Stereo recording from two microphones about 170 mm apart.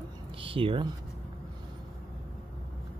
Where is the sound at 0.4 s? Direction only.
30° right (ahead or behind).